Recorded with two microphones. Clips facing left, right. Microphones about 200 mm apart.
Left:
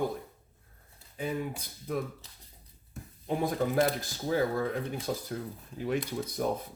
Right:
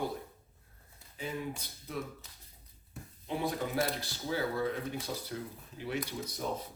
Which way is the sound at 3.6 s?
45° left (ahead or behind).